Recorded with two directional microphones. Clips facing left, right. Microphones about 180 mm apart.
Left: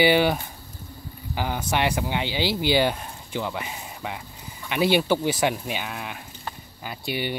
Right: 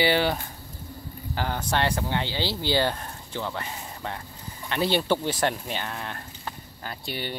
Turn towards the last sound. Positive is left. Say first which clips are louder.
# left 5 dB
turn(degrees=10)  # may be behind; listen again after turning